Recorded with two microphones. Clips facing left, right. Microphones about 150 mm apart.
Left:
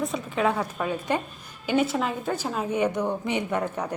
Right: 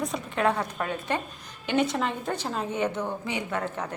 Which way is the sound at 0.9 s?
10° left (ahead or behind).